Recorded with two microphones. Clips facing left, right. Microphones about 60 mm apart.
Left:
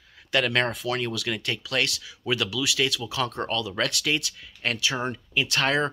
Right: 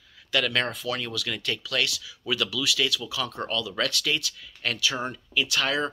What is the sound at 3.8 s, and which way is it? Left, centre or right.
Speech, left.